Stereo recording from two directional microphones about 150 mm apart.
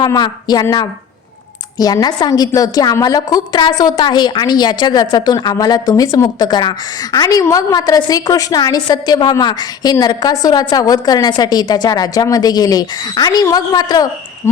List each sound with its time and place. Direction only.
0.0 s a woman's voice: 25° left (ahead or behind)